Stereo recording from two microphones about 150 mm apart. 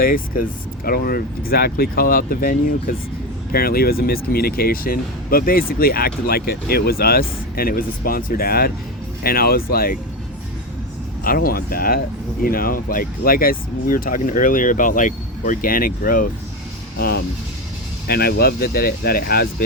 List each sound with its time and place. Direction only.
0.0 s speech: 70° left (ahead or behind)
0.9 s speech: 85° left
3.5 s speech: 85° left
11.2 s speech: 75° left (ahead or behind)
18.1 s speech: 90° left